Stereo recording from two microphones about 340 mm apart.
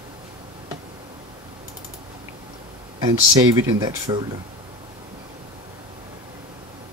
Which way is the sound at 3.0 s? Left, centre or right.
Centre.